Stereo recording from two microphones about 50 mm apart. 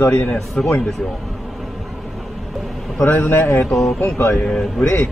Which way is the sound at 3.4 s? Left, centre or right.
Left.